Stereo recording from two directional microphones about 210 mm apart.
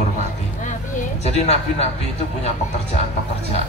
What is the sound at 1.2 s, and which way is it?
Speech, 30° left (ahead or behind).